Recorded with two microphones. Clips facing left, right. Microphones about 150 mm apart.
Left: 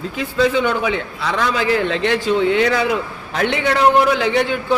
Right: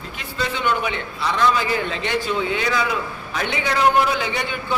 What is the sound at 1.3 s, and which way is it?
A man's voice, 90° left.